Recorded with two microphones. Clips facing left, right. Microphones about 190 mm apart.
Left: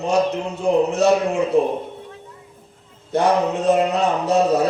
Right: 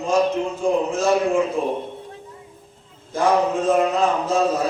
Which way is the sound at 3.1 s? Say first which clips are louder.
Left 1 dB; 65° left (ahead or behind).